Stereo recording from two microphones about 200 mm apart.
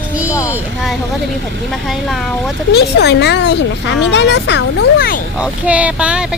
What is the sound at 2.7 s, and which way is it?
Speech, 55° left (ahead or behind).